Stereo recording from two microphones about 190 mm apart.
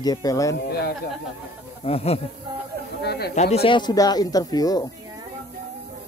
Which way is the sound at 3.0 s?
60° left (ahead or behind).